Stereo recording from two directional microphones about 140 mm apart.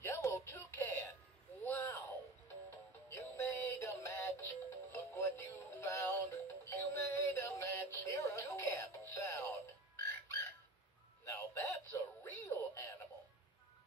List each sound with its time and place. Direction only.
0.0 s music: 20° left (ahead or behind)
1.6 s a sound: 15° left (ahead or behind)
3.1 s synthetic singing: 20° left (ahead or behind)
11.2 s music: 20° left (ahead or behind)